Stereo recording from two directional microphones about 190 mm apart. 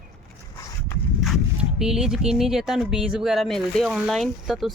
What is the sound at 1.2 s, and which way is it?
Speech, centre (ahead or behind).